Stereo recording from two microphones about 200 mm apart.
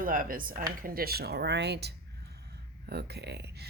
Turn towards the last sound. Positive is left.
turn(degrees=-55)  # may be behind; listen again after turning